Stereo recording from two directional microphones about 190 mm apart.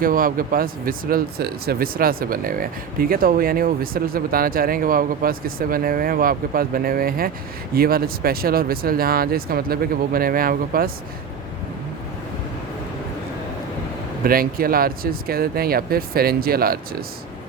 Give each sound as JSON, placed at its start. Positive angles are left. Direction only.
{"t": 0.0, "sound": "speech", "side_deg": -45}
{"t": 14.3, "sound": "speech", "side_deg": -50}